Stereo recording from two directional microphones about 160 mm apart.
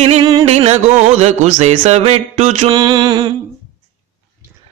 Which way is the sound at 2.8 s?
30° right (ahead or behind).